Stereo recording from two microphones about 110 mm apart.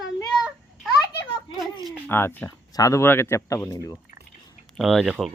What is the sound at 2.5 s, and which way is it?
Speech, 35° left (ahead or behind).